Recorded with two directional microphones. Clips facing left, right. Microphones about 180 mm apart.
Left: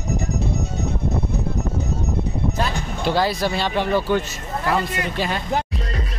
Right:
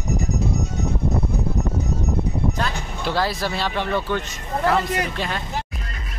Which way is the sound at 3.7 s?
5° left (ahead or behind).